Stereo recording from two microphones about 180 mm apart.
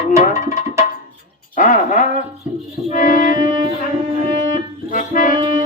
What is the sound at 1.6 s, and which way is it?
Speech, 45° left (ahead or behind).